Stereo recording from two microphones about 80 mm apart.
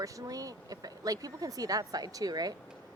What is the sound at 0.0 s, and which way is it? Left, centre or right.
Speech, right.